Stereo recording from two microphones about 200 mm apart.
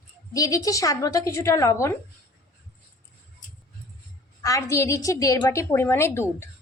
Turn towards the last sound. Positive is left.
turn(degrees=10)  # may be behind; listen again after turning